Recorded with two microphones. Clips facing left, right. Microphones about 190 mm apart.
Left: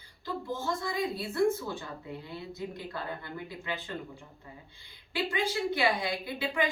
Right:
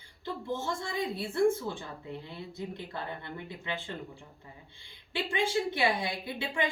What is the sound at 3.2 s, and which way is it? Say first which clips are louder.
Speech: left 1 dB; 25° right (ahead or behind).